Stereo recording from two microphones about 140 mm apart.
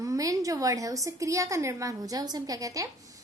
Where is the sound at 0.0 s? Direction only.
25° right (ahead or behind).